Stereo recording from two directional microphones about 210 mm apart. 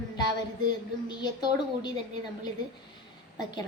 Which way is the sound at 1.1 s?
20° left (ahead or behind).